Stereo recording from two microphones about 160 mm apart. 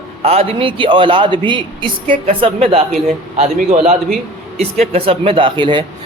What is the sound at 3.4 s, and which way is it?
A man's voice, 45° right (ahead or behind).